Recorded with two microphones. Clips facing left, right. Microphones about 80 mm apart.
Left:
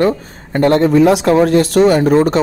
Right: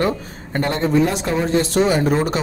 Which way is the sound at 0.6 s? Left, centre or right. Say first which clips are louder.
Left 8 dB; left.